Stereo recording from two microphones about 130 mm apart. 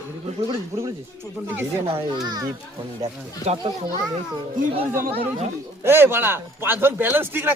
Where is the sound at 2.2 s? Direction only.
30° right (ahead or behind).